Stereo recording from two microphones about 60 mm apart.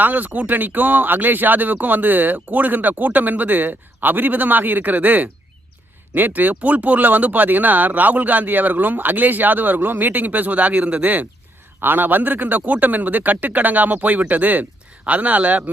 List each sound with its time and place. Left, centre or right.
0.0 s speech: right